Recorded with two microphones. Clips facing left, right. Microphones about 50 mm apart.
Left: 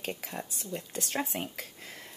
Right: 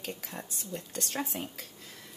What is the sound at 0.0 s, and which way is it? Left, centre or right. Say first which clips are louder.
Speech: left 3 dB; left.